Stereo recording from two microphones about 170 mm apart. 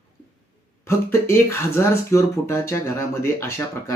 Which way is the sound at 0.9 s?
15° left (ahead or behind).